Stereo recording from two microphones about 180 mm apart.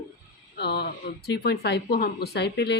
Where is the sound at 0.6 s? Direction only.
65° left (ahead or behind).